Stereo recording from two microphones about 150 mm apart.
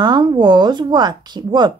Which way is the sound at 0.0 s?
30° right (ahead or behind).